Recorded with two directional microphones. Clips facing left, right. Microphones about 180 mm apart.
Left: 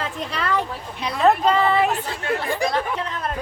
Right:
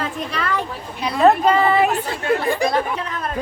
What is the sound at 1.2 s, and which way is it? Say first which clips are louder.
Speech: right 3 dB; 10° right (ahead or behind).